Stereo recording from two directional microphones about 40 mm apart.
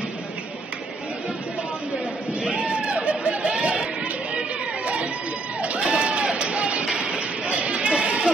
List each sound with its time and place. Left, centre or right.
2.4 s chatter: right
5.6 s run: right
6.9 s sheep: right